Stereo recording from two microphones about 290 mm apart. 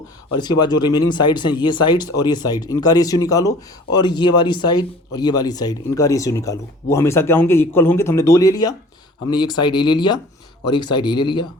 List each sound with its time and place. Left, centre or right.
0.3 s speech: centre